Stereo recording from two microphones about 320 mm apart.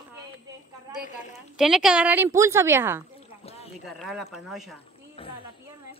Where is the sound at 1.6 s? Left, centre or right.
Centre.